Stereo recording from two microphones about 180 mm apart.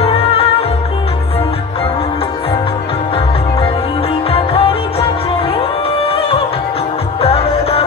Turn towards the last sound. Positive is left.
turn(degrees=30)  # may be behind; listen again after turning